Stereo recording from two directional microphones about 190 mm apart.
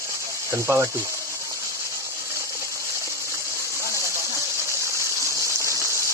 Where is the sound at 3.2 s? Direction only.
15° right (ahead or behind).